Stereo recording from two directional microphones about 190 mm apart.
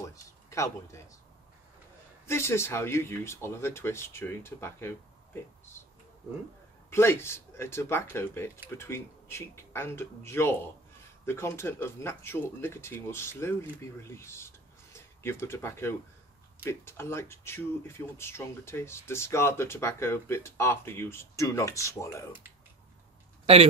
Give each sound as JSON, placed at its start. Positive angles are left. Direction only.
{"t": 0.0, "sound": "a sound", "side_deg": 15}
{"t": 2.2, "sound": "speech", "side_deg": 15}
{"t": 6.9, "sound": "speech", "side_deg": 15}
{"t": 23.4, "sound": "speech", "side_deg": -30}